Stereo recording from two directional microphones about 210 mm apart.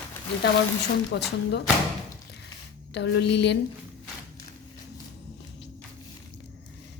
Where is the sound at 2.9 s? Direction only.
55° left (ahead or behind).